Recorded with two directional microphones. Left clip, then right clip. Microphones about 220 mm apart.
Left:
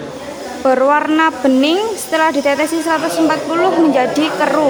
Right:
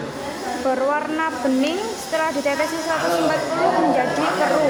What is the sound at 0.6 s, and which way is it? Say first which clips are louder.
A woman's voice: left 9 dB; 45° left (ahead or behind).